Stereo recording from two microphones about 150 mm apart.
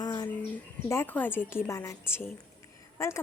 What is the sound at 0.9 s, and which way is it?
Speech, 15° left (ahead or behind).